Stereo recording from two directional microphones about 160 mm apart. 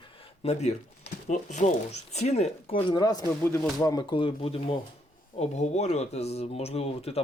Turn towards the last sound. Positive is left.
turn(degrees=40)  # may be behind; listen again after turning